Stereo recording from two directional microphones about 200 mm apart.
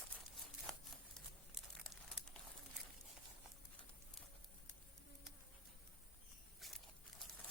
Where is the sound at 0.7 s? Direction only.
5° left (ahead or behind).